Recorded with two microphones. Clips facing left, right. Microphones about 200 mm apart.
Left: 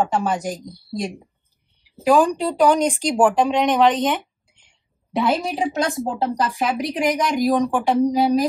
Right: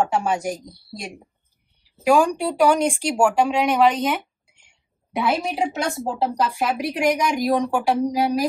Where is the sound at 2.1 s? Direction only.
10° right (ahead or behind).